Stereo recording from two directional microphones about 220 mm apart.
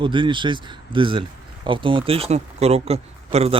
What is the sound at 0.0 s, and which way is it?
Speech, 20° right (ahead or behind).